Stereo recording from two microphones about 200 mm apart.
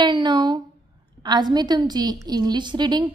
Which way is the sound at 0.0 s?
20° right (ahead or behind).